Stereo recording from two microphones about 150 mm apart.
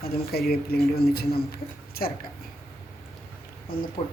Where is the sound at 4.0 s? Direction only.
35° left (ahead or behind).